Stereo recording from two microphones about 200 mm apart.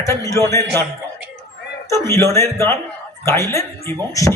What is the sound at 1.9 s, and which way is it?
Speech, 15° left (ahead or behind).